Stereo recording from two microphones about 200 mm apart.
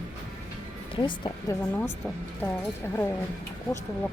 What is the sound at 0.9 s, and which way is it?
Speech, 20° left (ahead or behind).